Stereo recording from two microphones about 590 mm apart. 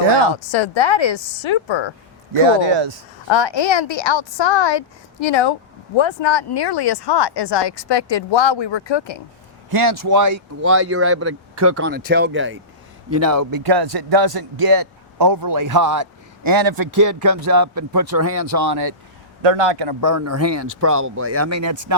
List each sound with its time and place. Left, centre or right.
0.3 s speech: left
2.3 s speech: right
3.2 s speech: left
9.6 s a man's voice: right
13.7 s a man's voice: right
18.1 s speech: right
18.4 s a man's voice: right
19.5 s speech: right